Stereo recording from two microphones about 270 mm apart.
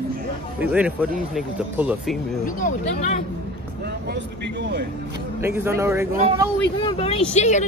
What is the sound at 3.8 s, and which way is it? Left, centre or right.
Speech, right.